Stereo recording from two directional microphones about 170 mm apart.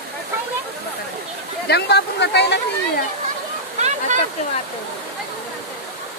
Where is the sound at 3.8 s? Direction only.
45° right (ahead or behind).